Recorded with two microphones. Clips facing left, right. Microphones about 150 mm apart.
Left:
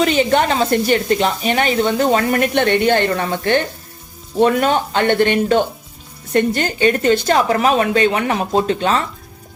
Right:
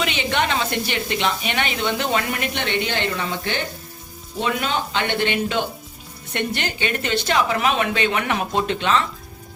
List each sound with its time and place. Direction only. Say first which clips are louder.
0.0 s a woman's voice: left 8 dB; 40° left (ahead or behind)